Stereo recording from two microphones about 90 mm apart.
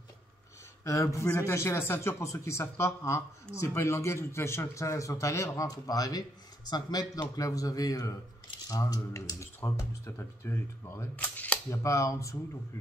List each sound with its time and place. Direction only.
0.8 s speech: 35° left (ahead or behind)
11.2 s a sound: 15° left (ahead or behind)
11.7 s speech: 35° left (ahead or behind)